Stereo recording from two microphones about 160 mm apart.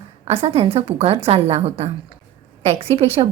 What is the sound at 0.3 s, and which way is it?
A woman's voice, 40° right (ahead or behind).